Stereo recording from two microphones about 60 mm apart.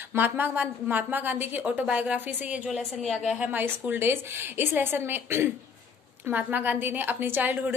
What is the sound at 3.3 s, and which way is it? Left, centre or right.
A woman's voice, right.